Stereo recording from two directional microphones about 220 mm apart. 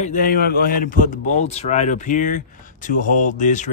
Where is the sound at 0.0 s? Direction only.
40° left (ahead or behind).